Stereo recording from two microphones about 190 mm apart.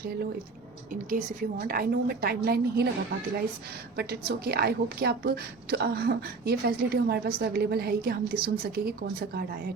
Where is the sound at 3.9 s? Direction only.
55° right (ahead or behind).